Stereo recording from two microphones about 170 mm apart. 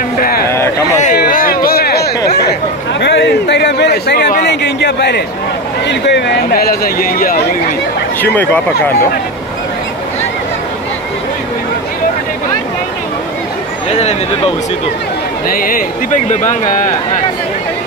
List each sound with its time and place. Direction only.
0.2 s a sound: 60° left (ahead or behind)
3.0 s a man's voice: 90° left; by 4.4 s 75° left (ahead or behind)
4.5 s speech: 90° left; by 7.3 s 60° left (ahead or behind)
8.2 s speech: 10° left (ahead or behind)
13.8 s a sound: 40° left (ahead or behind)
15.4 s speech: 55° left (ahead or behind)